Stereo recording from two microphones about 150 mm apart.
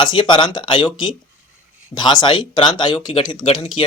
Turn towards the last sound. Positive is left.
turn(degrees=35)  # may be behind; listen again after turning